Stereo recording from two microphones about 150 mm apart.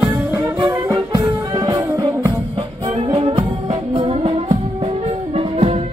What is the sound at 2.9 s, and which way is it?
Music, 40° right (ahead or behind).